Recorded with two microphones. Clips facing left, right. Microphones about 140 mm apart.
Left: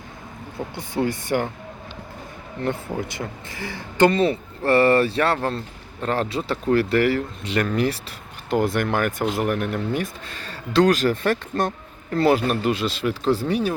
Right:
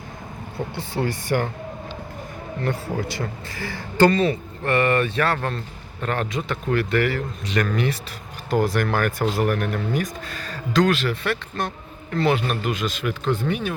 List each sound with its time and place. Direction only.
0.8 s speech: 20° left (ahead or behind)
2.6 s speech: 20° left (ahead or behind)